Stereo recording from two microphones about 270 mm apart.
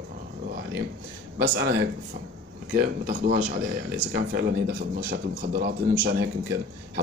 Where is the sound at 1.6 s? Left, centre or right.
Right.